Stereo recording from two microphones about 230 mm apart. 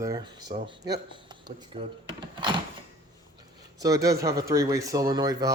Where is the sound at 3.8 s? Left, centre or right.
Centre.